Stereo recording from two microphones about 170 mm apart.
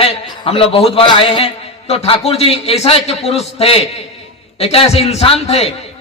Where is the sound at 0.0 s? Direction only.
35° left (ahead or behind).